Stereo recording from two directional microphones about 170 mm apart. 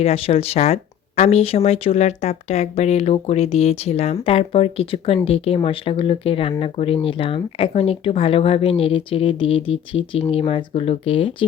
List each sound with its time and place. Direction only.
0.0 s speech: 35° left (ahead or behind)